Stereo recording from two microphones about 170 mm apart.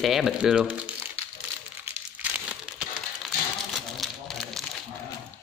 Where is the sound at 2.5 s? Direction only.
5° right (ahead or behind).